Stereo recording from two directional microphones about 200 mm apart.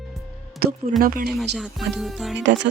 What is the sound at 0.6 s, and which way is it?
Speech, 45° right (ahead or behind).